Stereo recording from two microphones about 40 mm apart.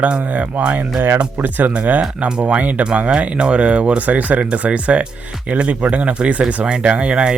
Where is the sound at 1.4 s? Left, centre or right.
Right.